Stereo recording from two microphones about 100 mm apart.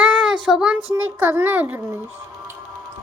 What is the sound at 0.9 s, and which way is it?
A child's voice, 15° right (ahead or behind).